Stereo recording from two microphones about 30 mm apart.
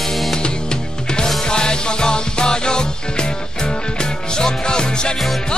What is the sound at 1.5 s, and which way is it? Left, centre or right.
Music, left.